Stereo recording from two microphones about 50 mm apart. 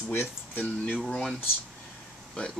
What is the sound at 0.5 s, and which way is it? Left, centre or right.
Speech, left.